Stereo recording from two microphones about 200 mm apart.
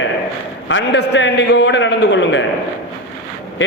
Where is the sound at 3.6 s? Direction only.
70° left (ahead or behind).